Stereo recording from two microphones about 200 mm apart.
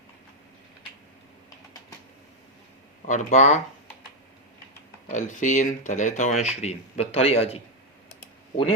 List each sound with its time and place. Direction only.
3.1 s speech: 40° left (ahead or behind)
5.0 s speech: 40° left (ahead or behind)